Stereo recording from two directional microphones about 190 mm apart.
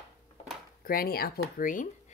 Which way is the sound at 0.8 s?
50° left (ahead or behind).